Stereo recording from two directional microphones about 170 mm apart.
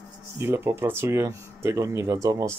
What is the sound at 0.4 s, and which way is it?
Speech, 15° right (ahead or behind).